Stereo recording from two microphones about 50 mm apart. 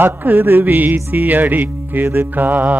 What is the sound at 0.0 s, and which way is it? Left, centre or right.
Music, right.